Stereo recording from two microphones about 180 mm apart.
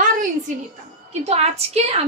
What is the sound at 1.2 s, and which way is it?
Speech, 35° right (ahead or behind).